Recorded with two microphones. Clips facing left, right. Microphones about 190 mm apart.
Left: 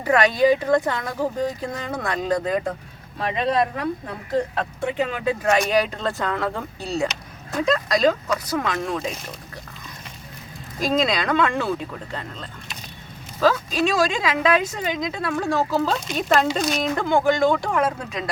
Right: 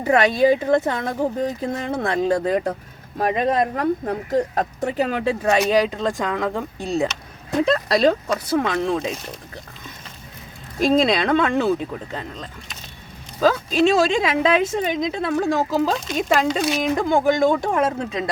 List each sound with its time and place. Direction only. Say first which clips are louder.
0.0 s speech: right 1 dB; 25° right (ahead or behind)
3.2 s speech: right 2 dB; 45° right (ahead or behind)
5.5 s speech: right 3 dB; 20° right (ahead or behind)
7.7 s speech: right 1 dB; 30° right (ahead or behind)
10.8 s speech: right 4 dB; 25° right (ahead or behind)
13.4 s speech: right 3 dB; 25° right (ahead or behind)
16.0 s speech: right 1 dB; centre (ahead or behind); by 18.3 s 25° right (ahead or behind)